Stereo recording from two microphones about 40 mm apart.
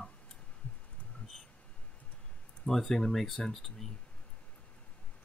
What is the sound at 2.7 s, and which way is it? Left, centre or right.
Speech, centre.